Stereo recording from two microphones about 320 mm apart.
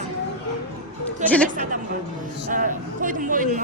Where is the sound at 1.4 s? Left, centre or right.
Right.